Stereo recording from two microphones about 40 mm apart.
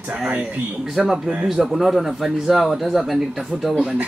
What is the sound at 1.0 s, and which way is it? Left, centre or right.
Speech, centre.